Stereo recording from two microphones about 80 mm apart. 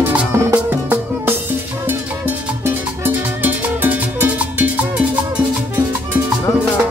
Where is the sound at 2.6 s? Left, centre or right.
Right.